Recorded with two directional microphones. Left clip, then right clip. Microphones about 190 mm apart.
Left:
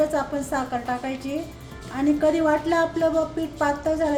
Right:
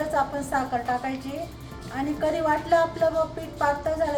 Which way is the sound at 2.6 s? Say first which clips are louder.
Even; 30° left (ahead or behind).